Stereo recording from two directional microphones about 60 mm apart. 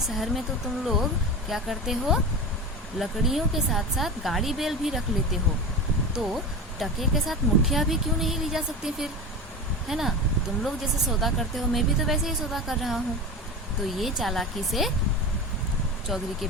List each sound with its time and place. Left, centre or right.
0.1 s speech: centre
1.5 s speech: centre
16.0 s speech: centre